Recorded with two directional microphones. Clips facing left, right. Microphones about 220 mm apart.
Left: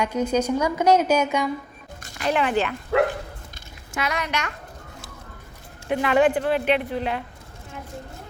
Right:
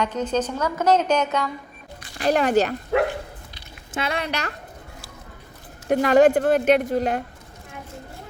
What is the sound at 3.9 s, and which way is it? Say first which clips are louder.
Speech: right 1 dB; 30° right (ahead or behind).